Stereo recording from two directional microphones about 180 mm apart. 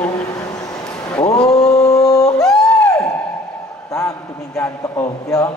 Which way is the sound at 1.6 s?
20° left (ahead or behind).